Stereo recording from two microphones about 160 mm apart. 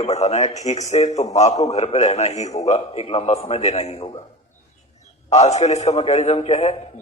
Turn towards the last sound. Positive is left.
turn(degrees=45)  # may be behind; listen again after turning